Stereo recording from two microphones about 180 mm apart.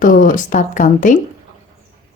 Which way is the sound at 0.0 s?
50° left (ahead or behind).